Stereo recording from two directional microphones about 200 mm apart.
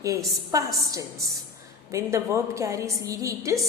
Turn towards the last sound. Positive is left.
turn(degrees=-15)  # may be behind; listen again after turning